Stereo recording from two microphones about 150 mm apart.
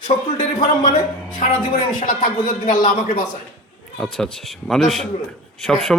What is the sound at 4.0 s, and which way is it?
A man's voice, centre (ahead or behind).